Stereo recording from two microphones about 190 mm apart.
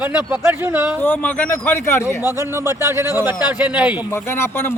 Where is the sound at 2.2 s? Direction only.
15° right (ahead or behind).